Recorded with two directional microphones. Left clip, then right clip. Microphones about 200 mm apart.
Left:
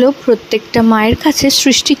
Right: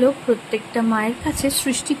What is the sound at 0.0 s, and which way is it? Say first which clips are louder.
Speech: left 7 dB; 40° left (ahead or behind).